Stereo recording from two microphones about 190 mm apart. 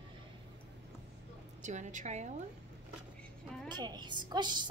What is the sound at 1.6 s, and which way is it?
Speech, 40° right (ahead or behind).